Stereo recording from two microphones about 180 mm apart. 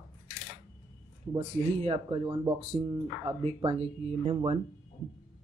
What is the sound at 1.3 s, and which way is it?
Speech, 30° right (ahead or behind).